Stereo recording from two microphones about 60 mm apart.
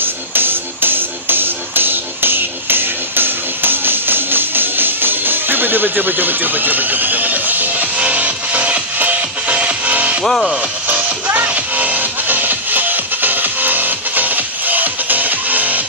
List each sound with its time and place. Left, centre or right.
0.0 s music: right
10.2 s speech: centre
10.9 s music: right